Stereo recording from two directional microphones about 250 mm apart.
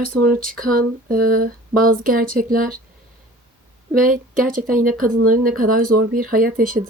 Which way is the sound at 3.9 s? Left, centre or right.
Right.